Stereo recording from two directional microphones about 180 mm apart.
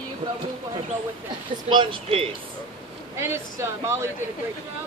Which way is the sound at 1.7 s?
30° right (ahead or behind).